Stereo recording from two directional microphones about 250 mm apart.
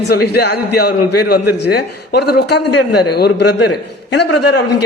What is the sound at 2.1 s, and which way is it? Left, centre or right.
A man's voice, left.